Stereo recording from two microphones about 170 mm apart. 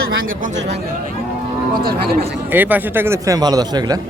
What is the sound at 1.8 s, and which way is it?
Speech, 60° right (ahead or behind).